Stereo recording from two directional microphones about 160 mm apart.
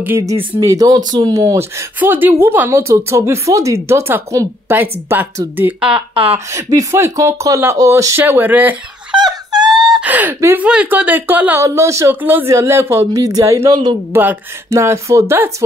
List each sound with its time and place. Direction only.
0.0 s speech: 15° right (ahead or behind)
6.3 s speech: 20° right (ahead or behind)
9.1 s wail: 25° right (ahead or behind)
9.9 s speech: 10° right (ahead or behind)